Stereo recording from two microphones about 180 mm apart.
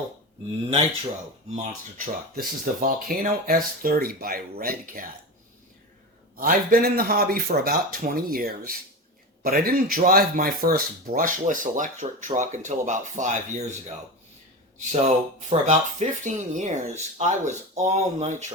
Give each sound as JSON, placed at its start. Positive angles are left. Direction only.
{"t": 1.5, "sound": "speech", "side_deg": -45}
{"t": 2.3, "sound": "speech", "side_deg": -55}
{"t": 6.3, "sound": "speech", "side_deg": -50}
{"t": 14.8, "sound": "speech", "side_deg": -40}